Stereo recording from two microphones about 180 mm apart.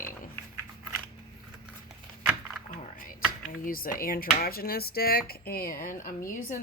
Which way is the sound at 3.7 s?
55° left (ahead or behind).